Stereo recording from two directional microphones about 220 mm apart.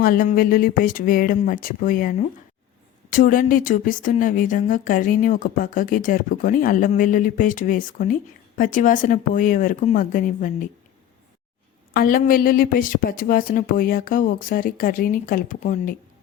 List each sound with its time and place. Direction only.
0.0 s a woman's voice: 40° left (ahead or behind)
11.9 s a woman's voice: 40° left (ahead or behind)